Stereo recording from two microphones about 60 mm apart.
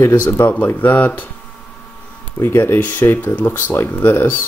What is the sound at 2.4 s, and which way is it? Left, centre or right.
Speech, left.